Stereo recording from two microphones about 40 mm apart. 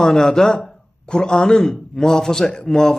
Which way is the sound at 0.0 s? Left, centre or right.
Centre.